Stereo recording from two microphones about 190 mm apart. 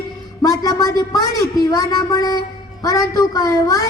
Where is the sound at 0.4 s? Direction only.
20° left (ahead or behind).